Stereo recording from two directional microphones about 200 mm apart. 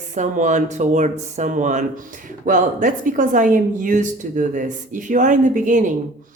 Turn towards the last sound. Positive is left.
turn(degrees=-40)  # may be behind; listen again after turning